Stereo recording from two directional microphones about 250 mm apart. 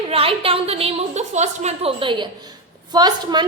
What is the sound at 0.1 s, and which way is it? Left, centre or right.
A woman's voice, right.